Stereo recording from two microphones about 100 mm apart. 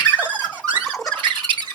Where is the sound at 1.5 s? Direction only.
60° right (ahead or behind).